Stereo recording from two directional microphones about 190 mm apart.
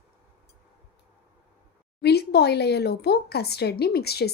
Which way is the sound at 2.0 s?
60° left (ahead or behind).